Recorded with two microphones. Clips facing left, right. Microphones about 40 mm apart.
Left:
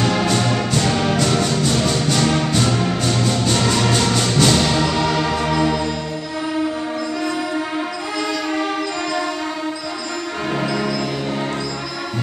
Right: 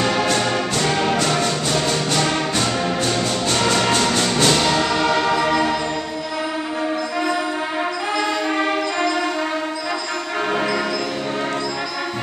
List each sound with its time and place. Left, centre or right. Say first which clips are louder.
0.0 s orchestra: even; centre
0.3 s music: left 1 dB; centre